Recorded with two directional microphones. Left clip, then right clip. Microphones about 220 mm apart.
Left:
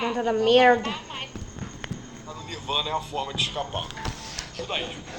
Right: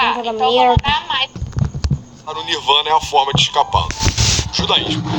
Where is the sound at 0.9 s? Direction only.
45° right (ahead or behind).